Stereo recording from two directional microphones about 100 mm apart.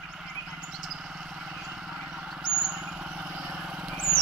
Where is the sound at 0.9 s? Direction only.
Centre (ahead or behind).